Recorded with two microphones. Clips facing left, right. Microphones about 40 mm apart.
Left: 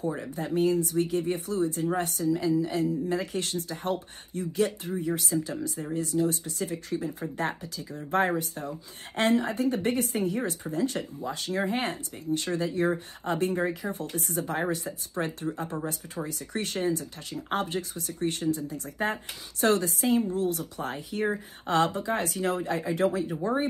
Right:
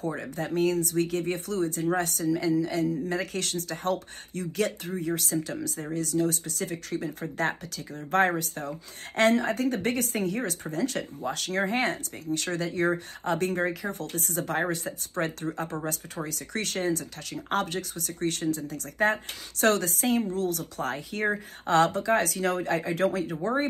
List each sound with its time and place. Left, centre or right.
0.2 s a woman's voice: right
20.3 s speech: left
20.7 s a woman's voice: right